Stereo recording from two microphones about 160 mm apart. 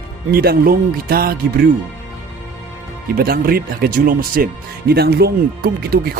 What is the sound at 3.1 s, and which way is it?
Speech, 70° right (ahead or behind).